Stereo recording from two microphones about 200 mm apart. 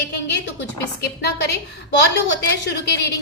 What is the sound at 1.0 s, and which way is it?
Speech, 55° left (ahead or behind).